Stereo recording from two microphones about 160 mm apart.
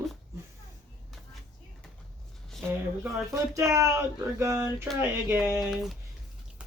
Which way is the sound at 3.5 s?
20° right (ahead or behind).